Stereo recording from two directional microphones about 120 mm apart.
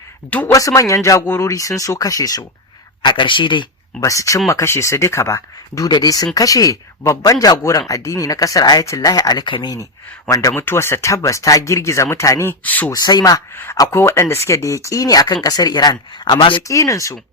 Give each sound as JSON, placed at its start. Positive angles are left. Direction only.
{"t": 0.3, "sound": "speech", "side_deg": 15}
{"t": 0.5, "sound": "speech", "side_deg": 25}
{"t": 3.0, "sound": "speech", "side_deg": 40}
{"t": 4.0, "sound": "speech", "side_deg": 25}
{"t": 12.9, "sound": "speech", "side_deg": 35}
{"t": 13.7, "sound": "speech", "side_deg": 25}
{"t": 16.6, "sound": "speech", "side_deg": 25}